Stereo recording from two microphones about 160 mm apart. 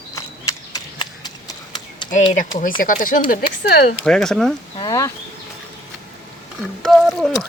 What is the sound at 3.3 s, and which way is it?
Speech, 80° left.